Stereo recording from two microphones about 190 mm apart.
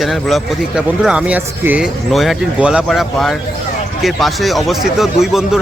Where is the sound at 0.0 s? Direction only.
Centre (ahead or behind).